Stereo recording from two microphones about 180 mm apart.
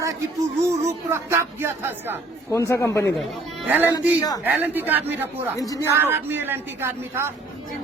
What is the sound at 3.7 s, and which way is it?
Speech, 10° right (ahead or behind).